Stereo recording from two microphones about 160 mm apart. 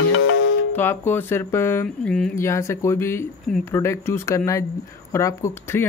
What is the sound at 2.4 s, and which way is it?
Speech, 15° left (ahead or behind).